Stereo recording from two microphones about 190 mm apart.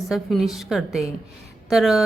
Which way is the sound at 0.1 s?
Centre (ahead or behind).